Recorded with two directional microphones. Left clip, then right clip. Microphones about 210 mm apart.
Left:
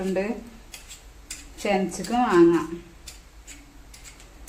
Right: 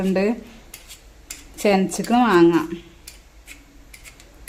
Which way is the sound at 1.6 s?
55° right (ahead or behind).